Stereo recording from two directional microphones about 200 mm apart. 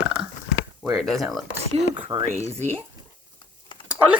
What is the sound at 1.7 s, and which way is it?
Speech, 25° right (ahead or behind).